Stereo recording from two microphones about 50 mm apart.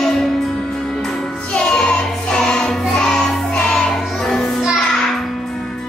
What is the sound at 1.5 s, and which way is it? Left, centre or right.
Music, centre.